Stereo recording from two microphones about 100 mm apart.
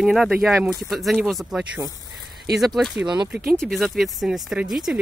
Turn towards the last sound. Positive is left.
turn(degrees=-5)  # may be behind; listen again after turning